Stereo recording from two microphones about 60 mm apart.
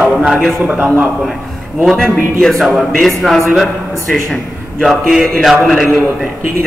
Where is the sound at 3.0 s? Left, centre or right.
Centre.